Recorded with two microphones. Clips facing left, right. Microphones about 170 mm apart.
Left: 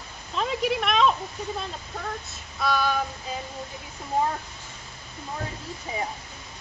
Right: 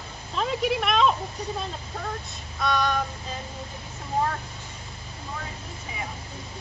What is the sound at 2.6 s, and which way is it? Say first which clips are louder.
Female singing: even; 5° left (ahead or behind).